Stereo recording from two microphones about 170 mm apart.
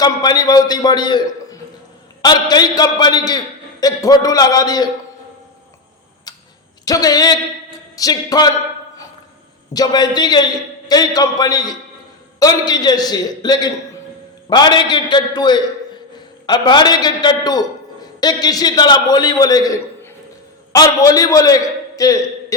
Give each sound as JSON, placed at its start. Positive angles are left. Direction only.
{"t": 0.0, "sound": "a man's voice", "side_deg": 25}
{"t": 6.3, "sound": "tick-tock", "side_deg": 20}
{"t": 6.8, "sound": "speech", "side_deg": 20}
{"t": 9.7, "sound": "a man's voice", "side_deg": 25}